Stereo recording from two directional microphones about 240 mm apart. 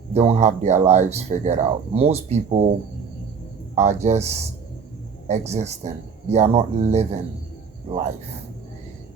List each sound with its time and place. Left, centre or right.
0.1 s speech: right
3.8 s speech: right